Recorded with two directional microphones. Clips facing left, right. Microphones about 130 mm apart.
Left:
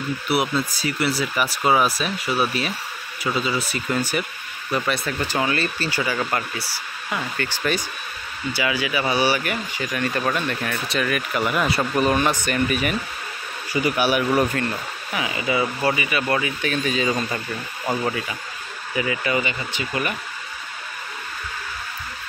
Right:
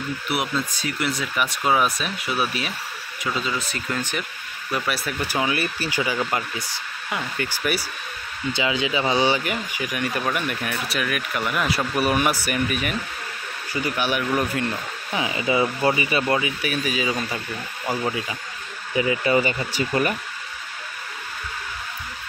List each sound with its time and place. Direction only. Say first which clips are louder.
0.3 s speech: left 4 dB; 5° left (ahead or behind)
4.7 s speech: left 2 dB; 5° right (ahead or behind)
8.5 s speech: even; 20° right (ahead or behind); by 12.9 s centre (ahead or behind)
13.7 s speech: left 4 dB; 10° left (ahead or behind)
15.1 s speech: right 1 dB; 25° right (ahead or behind)
16.3 s speech: left 1 dB; 15° right (ahead or behind)
18.9 s speech: right 3 dB; 30° right (ahead or behind)